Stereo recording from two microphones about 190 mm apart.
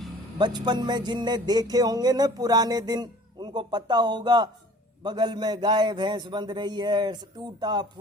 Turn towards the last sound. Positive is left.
turn(degrees=-20)  # may be behind; listen again after turning